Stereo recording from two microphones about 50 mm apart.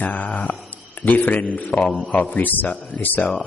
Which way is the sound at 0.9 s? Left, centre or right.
Left.